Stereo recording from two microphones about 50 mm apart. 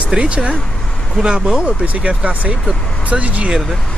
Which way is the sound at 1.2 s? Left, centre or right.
Centre.